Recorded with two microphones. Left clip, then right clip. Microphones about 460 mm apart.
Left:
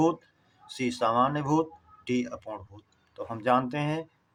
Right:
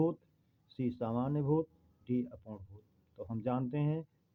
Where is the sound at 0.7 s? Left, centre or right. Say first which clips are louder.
Left 11 dB; right.